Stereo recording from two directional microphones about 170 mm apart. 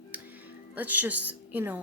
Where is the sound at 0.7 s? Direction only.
10° right (ahead or behind).